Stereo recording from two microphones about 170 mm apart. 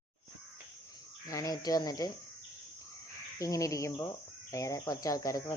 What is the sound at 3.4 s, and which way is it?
Crow, 20° left (ahead or behind).